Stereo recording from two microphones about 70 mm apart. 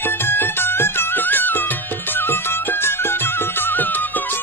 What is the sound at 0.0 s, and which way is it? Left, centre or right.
Music, left.